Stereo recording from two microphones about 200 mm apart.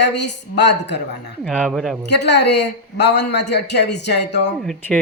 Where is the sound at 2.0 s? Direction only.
60° left (ahead or behind).